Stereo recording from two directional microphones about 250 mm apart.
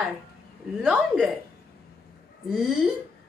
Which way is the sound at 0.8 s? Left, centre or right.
Centre.